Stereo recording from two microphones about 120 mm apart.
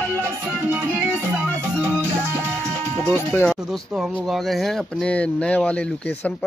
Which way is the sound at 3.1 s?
20° left (ahead or behind).